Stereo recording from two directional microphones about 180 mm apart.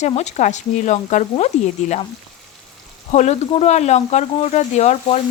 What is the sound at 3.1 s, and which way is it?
Speech, 40° left (ahead or behind).